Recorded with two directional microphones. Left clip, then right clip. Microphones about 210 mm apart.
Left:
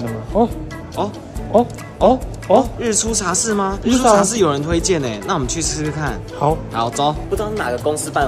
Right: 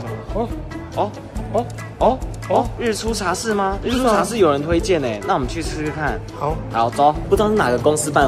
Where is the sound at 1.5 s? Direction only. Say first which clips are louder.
Left 6 dB; 50° left (ahead or behind).